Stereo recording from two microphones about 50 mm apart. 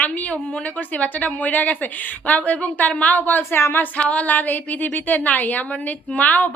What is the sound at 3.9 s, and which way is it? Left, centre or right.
A woman's voice, left.